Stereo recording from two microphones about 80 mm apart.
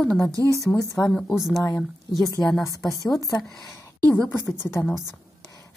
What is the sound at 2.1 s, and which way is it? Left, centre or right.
Speech, left.